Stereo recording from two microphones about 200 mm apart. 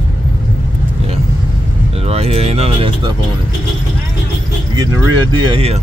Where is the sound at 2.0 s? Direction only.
30° right (ahead or behind).